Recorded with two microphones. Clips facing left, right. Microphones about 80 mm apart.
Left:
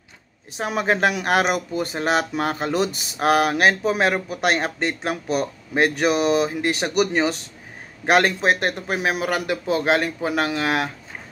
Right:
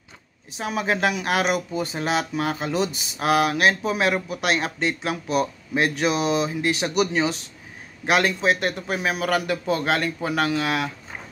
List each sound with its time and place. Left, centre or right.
0.7 s speech: left
2.7 s speech: left
3.2 s speech: left
8.9 s a man's voice: left
10.5 s speech: left